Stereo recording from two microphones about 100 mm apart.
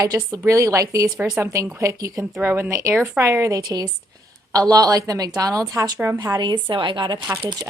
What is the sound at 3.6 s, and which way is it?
Speech, 40° right (ahead or behind).